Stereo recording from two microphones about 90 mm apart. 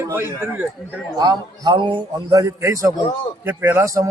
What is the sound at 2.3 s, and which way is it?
A man's voice, 40° right (ahead or behind).